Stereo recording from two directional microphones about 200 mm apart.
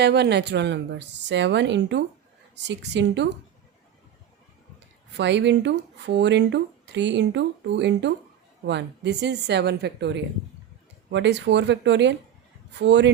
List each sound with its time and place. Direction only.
0.0 s speech: 55° right (ahead or behind)
5.1 s speech: 60° right (ahead or behind)